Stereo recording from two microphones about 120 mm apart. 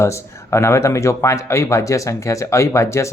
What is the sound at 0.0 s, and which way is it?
Speech, 25° left (ahead or behind).